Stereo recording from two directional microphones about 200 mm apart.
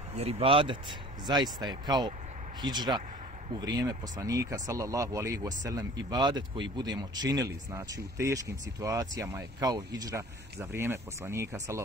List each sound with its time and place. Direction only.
0.1 s speech: 30° right (ahead or behind); by 11.8 s 15° right (ahead or behind)